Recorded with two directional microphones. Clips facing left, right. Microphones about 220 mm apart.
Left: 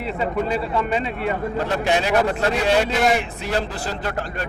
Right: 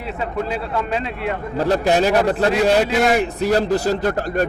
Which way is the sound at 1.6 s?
40° right (ahead or behind).